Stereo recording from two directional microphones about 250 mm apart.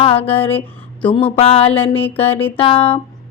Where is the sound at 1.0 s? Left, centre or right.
Left.